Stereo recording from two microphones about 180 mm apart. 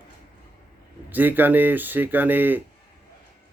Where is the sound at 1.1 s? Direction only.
10° right (ahead or behind).